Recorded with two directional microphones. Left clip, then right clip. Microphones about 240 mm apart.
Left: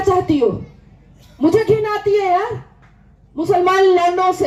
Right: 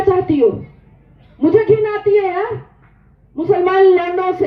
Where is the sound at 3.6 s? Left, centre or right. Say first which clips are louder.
Right 1 dB; left.